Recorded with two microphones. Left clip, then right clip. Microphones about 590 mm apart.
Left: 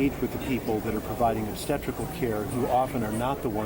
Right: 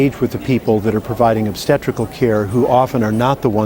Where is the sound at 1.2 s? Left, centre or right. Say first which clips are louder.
Right 12 dB; right.